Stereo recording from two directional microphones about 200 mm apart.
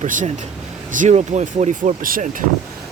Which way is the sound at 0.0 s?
40° right (ahead or behind).